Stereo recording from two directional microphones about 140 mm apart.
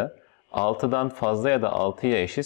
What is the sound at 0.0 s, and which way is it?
Speech, 25° left (ahead or behind).